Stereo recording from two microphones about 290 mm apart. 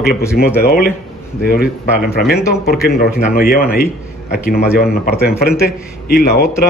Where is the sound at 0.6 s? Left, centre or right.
Left.